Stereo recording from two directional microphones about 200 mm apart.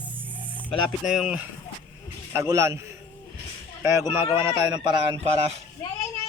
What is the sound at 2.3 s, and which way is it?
Speech, 15° right (ahead or behind).